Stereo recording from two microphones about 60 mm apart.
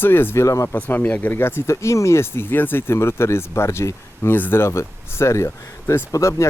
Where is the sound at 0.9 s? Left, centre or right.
Left.